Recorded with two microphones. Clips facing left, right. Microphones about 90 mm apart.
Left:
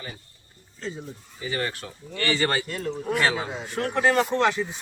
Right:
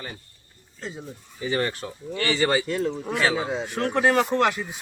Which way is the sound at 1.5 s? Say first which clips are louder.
Right 4 dB; 25° right (ahead or behind).